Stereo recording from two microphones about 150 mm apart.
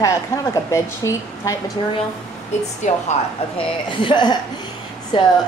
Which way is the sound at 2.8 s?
55° left (ahead or behind).